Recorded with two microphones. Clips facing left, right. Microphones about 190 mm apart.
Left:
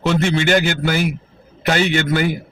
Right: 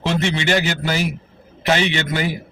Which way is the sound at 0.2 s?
50° left (ahead or behind).